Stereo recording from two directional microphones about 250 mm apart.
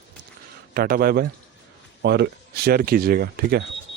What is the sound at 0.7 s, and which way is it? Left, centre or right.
Speech, right.